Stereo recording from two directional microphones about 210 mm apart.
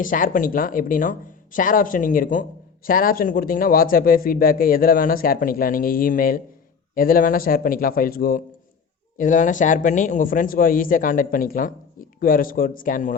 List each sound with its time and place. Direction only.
0.0 s a man's voice: 40° left (ahead or behind)